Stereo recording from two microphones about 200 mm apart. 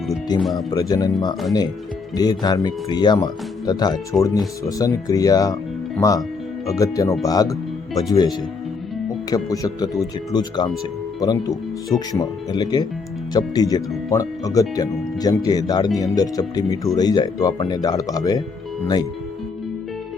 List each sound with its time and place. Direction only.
0.3 s speech: 20° left (ahead or behind)
2.1 s speech: 20° left (ahead or behind)